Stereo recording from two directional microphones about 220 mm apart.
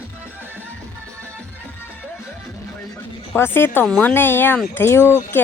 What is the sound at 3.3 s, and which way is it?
Speech, 10° left (ahead or behind).